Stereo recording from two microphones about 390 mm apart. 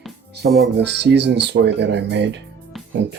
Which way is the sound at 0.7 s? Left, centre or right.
Right.